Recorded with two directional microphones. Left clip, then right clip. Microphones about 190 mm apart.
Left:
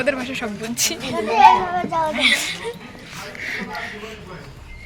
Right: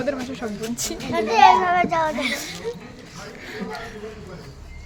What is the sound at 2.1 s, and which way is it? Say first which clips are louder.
Speech: left 8 dB; centre (ahead or behind).